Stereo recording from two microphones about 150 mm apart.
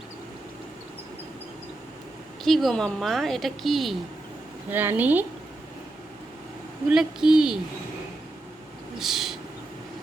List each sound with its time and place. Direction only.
2.4 s a woman's voice: centre (ahead or behind)
4.7 s a woman's voice: 10° right (ahead or behind)
6.8 s a woman's voice: 5° right (ahead or behind)
9.0 s a sound: centre (ahead or behind)